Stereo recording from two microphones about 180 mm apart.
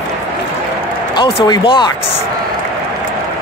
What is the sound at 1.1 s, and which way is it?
Speech, 30° left (ahead or behind).